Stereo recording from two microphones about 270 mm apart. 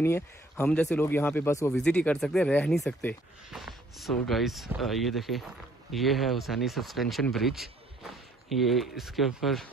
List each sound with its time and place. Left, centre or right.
0.0 s speech: centre